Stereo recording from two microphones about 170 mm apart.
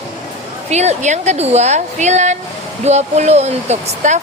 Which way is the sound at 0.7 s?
40° right (ahead or behind).